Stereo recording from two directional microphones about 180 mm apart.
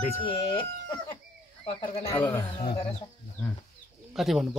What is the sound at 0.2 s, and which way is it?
Speech, 30° left (ahead or behind).